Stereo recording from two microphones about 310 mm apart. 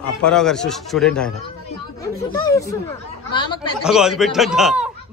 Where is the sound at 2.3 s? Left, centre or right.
Centre.